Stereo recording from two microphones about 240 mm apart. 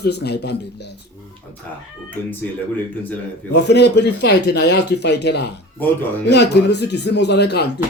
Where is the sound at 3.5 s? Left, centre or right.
Left.